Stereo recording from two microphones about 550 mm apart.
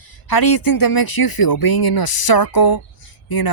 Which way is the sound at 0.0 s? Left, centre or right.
Left.